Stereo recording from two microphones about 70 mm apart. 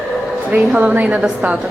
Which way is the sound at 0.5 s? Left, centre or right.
Right.